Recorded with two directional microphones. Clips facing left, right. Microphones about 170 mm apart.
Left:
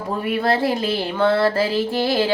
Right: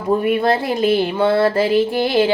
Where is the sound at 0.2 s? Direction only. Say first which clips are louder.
Right 3 dB; 20° right (ahead or behind).